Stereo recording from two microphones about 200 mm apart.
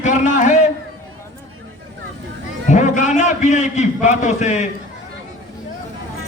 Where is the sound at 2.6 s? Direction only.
40° left (ahead or behind).